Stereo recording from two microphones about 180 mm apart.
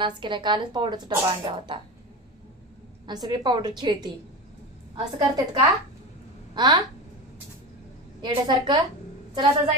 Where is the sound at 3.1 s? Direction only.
25° right (ahead or behind).